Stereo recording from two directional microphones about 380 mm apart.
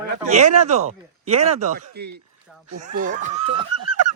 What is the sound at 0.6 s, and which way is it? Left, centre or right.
Speech, centre.